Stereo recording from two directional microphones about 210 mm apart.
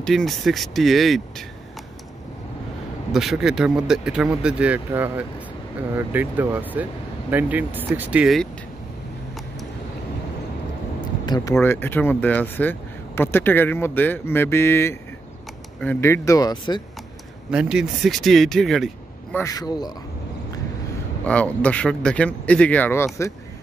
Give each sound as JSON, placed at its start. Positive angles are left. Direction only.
{"t": 0.0, "sound": "speech", "side_deg": 0}
{"t": 3.1, "sound": "speech", "side_deg": 0}
{"t": 11.2, "sound": "speech", "side_deg": 20}
{"t": 17.5, "sound": "speech", "side_deg": -5}
{"t": 19.3, "sound": "speech", "side_deg": 15}
{"t": 21.3, "sound": "speech", "side_deg": 5}